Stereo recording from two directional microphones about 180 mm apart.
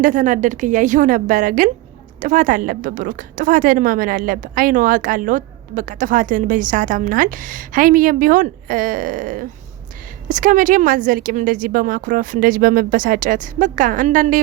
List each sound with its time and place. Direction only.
0.0 s a woman's voice: 45° right (ahead or behind)